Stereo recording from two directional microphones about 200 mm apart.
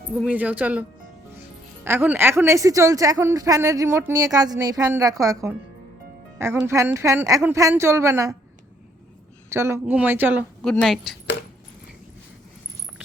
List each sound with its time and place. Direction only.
0.2 s a woman's voice: 5° right (ahead or behind)
9.5 s a woman's voice: 15° right (ahead or behind)
10.6 s a woman's voice: 5° left (ahead or behind)